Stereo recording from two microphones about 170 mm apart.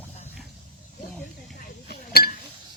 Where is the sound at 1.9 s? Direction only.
65° left (ahead or behind).